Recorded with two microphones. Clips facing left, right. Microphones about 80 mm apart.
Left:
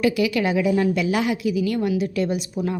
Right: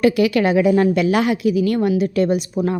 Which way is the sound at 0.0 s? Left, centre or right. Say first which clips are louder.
Right 5 dB; right.